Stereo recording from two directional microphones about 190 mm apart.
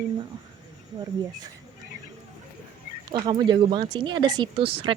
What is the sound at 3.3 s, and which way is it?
Speech, 25° right (ahead or behind).